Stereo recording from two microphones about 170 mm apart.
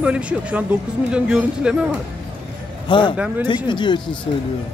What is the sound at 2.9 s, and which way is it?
Speech, 30° left (ahead or behind).